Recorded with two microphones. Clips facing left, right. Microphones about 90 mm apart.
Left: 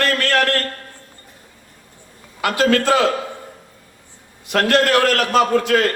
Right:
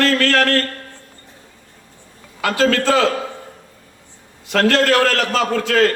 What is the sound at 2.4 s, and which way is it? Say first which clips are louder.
Speech: even; 15° left (ahead or behind).